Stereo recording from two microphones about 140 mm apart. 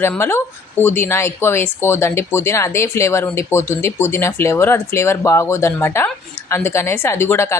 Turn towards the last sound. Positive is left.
turn(degrees=20)  # may be behind; listen again after turning